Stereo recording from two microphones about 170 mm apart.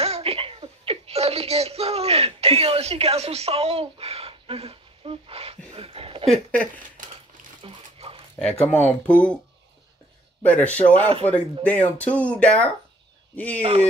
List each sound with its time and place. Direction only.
0.0 s a sound: 35° right (ahead or behind)
6.2 s speech: 5° left (ahead or behind)
7.6 s dog: 35° right (ahead or behind)
8.7 s speech: 10° left (ahead or behind)
10.4 s speech: 10° left (ahead or behind)
13.6 s speech: 35° right (ahead or behind)